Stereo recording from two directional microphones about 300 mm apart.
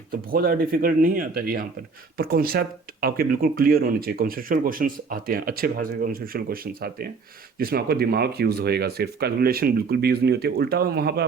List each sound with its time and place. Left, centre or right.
0.1 s speech: right